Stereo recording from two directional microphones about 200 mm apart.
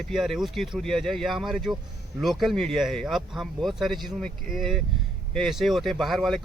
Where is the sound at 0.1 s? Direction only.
Centre (ahead or behind).